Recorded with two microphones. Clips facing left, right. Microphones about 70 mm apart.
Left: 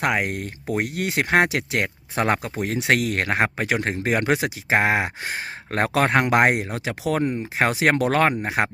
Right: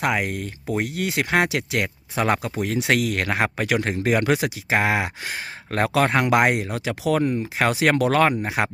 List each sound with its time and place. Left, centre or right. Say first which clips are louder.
0.0 s speech: even; left